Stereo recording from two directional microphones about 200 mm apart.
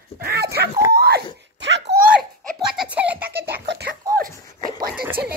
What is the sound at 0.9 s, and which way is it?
Screaming, 55° right (ahead or behind).